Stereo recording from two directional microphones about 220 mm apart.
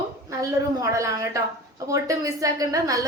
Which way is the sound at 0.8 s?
15° right (ahead or behind).